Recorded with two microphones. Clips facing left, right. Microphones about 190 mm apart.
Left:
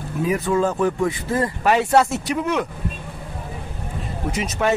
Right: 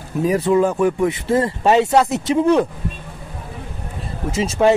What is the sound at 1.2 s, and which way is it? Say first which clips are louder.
Speech: right 5 dB; 25° right (ahead or behind).